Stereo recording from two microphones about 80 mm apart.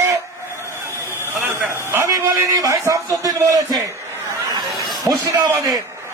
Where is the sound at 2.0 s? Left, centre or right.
Right.